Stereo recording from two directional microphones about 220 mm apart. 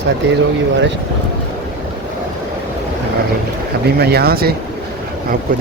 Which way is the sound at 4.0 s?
45° right (ahead or behind).